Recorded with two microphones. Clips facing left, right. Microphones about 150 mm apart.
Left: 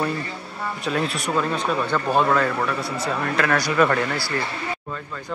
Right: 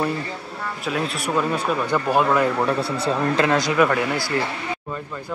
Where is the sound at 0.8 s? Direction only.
5° right (ahead or behind).